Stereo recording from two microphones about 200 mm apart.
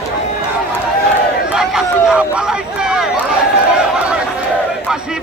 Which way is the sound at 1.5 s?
5° right (ahead or behind).